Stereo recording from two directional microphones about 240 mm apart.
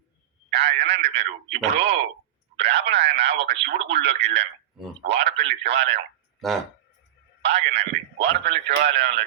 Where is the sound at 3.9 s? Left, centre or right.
Right.